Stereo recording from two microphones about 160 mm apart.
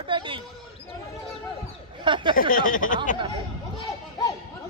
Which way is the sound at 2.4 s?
60° left (ahead or behind).